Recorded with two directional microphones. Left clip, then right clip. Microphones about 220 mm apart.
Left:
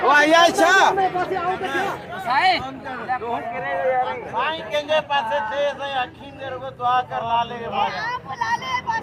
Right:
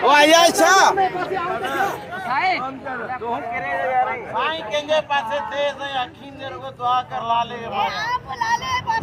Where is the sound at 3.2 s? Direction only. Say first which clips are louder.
Right 1 dB; 35° right (ahead or behind).